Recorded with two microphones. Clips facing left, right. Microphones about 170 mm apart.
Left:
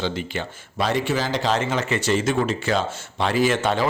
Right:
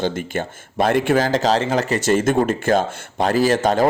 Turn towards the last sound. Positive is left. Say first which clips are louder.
# right 4 dB
turn(degrees=-40)  # may be behind; listen again after turning